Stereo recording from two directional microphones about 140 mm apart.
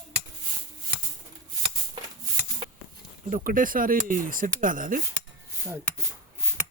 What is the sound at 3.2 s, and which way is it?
Speech, 75° right (ahead or behind).